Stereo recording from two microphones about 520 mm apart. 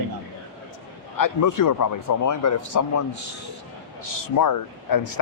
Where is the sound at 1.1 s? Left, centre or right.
Left.